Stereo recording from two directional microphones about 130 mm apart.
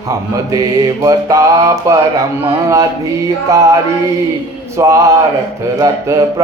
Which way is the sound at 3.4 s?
25° right (ahead or behind).